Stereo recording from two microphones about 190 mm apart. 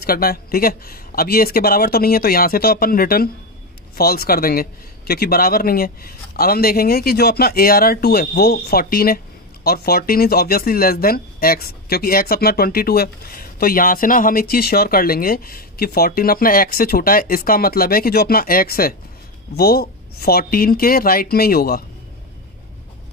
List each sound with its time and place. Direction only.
0.0 s a man's voice: 50° left (ahead or behind)